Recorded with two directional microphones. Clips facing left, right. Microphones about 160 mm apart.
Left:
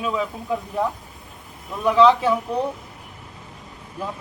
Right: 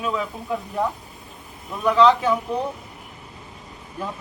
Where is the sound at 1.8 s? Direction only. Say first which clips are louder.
Left 1 dB; 5° left (ahead or behind).